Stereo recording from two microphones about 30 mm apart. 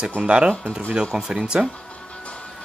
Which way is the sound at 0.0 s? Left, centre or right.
Right.